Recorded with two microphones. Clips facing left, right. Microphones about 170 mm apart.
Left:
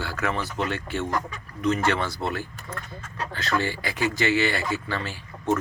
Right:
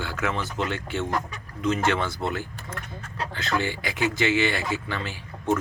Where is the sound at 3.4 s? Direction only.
15° right (ahead or behind).